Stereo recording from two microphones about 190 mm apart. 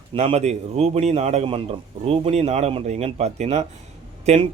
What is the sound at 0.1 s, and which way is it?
Speech, 30° right (ahead or behind).